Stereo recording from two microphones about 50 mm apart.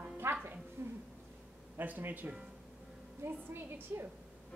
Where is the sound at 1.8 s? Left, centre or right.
Right.